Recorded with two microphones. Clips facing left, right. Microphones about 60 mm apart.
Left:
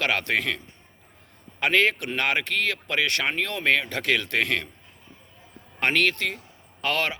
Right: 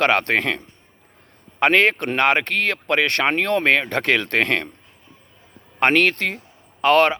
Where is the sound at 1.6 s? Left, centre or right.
Right.